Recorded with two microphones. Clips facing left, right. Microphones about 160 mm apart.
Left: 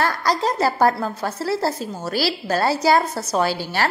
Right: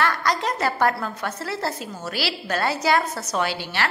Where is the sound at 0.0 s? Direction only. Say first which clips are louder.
Left 2 dB; 35° left (ahead or behind).